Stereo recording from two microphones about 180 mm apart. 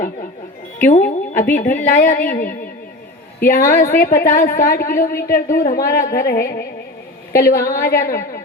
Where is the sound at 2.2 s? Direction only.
55° left (ahead or behind).